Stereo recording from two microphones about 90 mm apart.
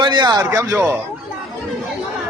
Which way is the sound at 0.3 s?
40° right (ahead or behind).